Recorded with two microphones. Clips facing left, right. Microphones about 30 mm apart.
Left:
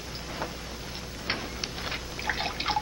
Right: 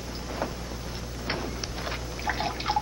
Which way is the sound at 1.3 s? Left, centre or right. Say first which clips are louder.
Even; left.